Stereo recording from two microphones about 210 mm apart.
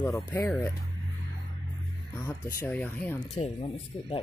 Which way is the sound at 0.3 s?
10° left (ahead or behind).